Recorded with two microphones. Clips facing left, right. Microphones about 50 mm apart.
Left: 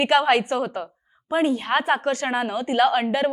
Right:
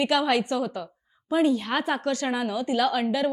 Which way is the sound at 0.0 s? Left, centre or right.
Left.